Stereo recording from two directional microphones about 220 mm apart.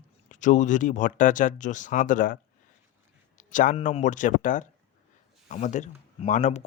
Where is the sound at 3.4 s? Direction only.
35° left (ahead or behind).